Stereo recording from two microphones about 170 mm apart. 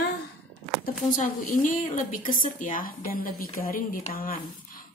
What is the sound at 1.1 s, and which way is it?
A woman's voice, 45° left (ahead or behind).